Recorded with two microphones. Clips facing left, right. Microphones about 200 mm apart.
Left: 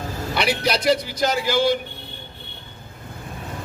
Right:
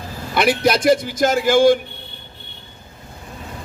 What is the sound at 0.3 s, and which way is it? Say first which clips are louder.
Speech: right 6 dB; 50° right (ahead or behind).